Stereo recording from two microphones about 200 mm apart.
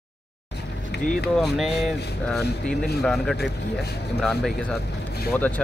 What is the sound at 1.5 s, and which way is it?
Speech, centre (ahead or behind).